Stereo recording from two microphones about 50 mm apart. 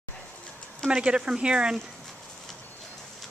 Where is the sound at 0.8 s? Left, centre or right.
Centre.